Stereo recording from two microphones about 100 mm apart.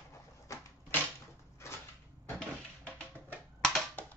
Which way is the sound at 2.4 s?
15° left (ahead or behind).